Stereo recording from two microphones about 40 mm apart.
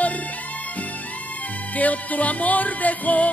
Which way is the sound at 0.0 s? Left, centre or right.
Left.